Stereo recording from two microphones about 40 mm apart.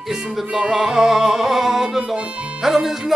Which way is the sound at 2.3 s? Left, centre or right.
Right.